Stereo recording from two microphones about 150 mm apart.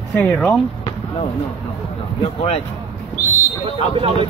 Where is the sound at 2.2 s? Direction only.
40° left (ahead or behind).